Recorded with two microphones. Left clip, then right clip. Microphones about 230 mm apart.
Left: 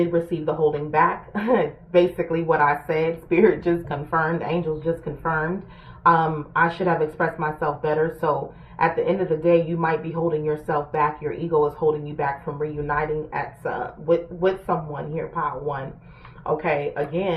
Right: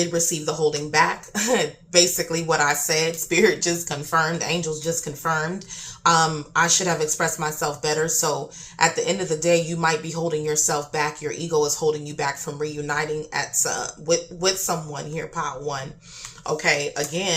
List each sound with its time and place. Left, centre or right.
0.1 s speech: right